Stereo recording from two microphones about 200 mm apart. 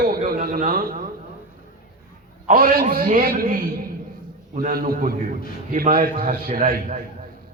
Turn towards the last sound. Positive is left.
turn(degrees=-40)  # may be behind; listen again after turning